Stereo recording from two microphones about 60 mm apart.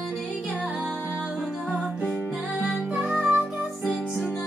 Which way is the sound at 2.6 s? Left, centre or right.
Right.